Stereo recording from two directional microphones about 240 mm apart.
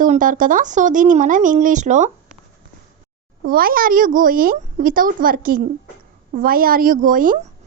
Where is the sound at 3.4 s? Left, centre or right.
Right.